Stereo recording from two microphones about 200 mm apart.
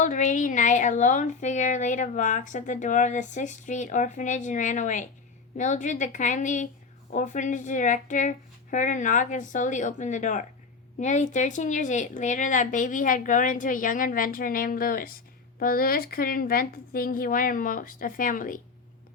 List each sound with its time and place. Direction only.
0.0 s a woman's voice: 40° left (ahead or behind)